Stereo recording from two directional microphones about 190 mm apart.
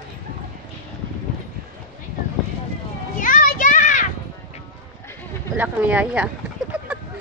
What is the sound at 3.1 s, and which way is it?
Children playing, 45° left (ahead or behind).